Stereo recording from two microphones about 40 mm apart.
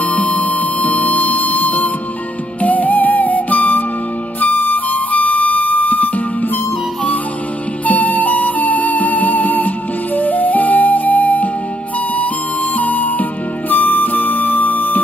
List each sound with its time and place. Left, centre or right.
0.0 s music: left
7.8 s music: left
12.7 s music: left